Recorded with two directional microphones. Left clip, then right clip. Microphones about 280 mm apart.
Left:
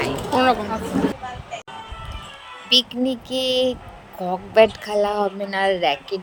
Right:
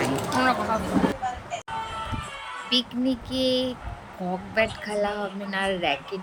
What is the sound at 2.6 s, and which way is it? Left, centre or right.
Speech, left.